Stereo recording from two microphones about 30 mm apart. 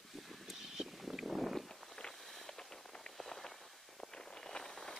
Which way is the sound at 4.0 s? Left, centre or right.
Centre.